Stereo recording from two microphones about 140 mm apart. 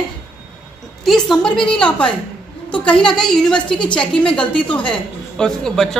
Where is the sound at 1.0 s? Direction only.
5° left (ahead or behind).